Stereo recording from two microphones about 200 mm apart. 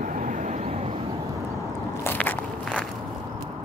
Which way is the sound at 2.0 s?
10° left (ahead or behind).